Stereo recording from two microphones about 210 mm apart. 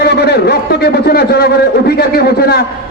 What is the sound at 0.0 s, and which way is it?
A man's voice, 50° left (ahead or behind).